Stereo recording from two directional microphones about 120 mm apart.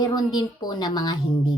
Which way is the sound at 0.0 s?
35° left (ahead or behind).